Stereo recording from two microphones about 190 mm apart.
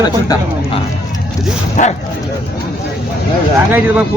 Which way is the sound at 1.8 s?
40° left (ahead or behind).